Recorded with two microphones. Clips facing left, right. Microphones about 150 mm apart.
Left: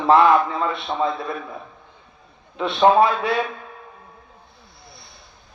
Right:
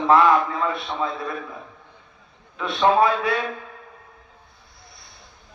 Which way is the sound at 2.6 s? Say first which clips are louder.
Left 3 dB; 25° left (ahead or behind).